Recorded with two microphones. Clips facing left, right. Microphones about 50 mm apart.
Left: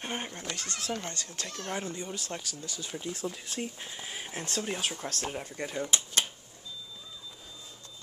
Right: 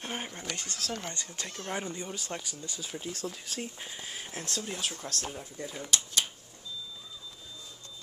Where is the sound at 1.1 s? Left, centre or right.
Centre.